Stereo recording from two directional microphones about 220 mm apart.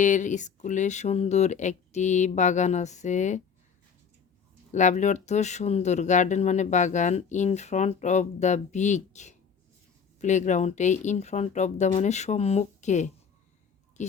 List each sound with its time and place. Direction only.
0.0 s speech: 35° left (ahead or behind)
4.7 s speech: 35° left (ahead or behind)